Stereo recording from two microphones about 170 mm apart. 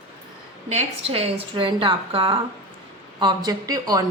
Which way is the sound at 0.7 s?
35° right (ahead or behind).